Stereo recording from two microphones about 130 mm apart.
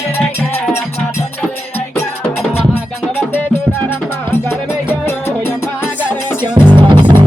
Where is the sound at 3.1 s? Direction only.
15° left (ahead or behind).